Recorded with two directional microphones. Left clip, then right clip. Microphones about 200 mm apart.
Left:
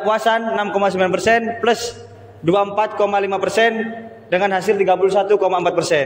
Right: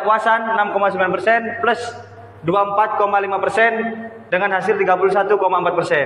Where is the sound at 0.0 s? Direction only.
50° left (ahead or behind).